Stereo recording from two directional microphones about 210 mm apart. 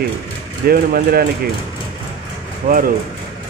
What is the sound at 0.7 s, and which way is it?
Speech, 45° right (ahead or behind).